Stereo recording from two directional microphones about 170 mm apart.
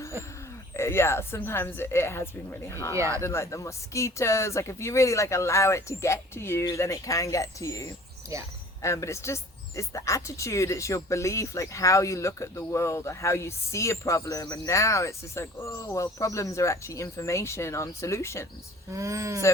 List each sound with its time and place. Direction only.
0.8 s speech: 15° left (ahead or behind)
2.9 s speech: 15° right (ahead or behind)
3.2 s speech: 15° left (ahead or behind)
18.9 s speech: 20° right (ahead or behind)